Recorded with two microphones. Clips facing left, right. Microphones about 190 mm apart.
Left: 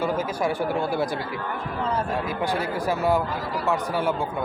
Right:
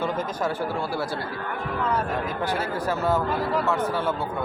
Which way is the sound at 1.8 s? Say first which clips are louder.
Even; 30° left (ahead or behind).